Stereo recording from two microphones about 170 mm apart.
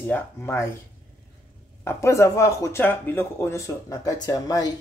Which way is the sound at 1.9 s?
15° left (ahead or behind).